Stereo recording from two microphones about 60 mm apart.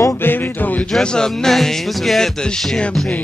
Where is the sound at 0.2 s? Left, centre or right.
Left.